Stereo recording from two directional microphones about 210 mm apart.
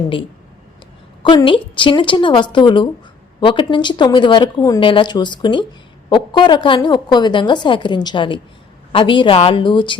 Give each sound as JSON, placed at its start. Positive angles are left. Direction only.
{"t": 1.2, "sound": "a woman's voice", "side_deg": 20}